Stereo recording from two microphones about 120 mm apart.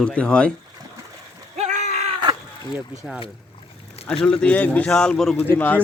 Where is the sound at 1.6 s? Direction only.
80° right.